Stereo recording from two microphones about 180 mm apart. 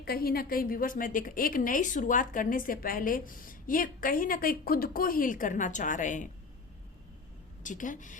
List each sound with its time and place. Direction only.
0.0 s a woman's voice: 55° left (ahead or behind)
7.6 s a woman's voice: 45° left (ahead or behind)